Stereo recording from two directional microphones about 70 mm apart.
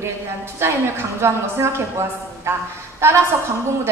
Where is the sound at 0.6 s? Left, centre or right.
Right.